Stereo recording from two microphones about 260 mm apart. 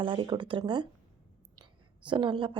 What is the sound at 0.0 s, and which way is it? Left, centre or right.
A woman's voice, centre.